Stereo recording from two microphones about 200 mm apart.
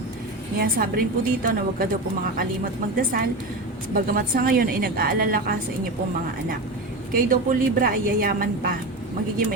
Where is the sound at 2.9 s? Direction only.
45° right (ahead or behind).